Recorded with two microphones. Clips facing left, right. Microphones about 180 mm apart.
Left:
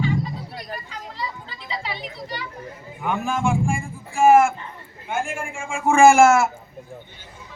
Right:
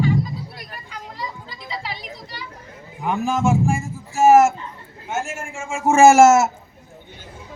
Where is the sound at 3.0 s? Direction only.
35° right (ahead or behind).